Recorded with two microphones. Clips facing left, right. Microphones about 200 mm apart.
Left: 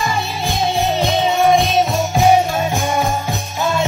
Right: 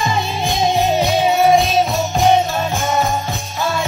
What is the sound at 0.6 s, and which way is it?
Music, 15° right (ahead or behind).